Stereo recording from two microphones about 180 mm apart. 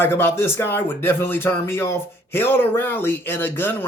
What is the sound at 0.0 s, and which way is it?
Speech, 10° left (ahead or behind).